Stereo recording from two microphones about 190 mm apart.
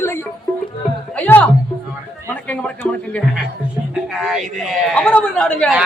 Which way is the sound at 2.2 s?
5° left (ahead or behind).